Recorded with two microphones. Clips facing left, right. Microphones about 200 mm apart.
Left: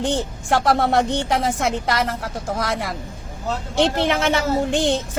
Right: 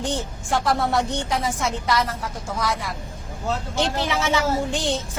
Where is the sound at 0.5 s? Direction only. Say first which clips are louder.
Left 4 dB; 60° left (ahead or behind).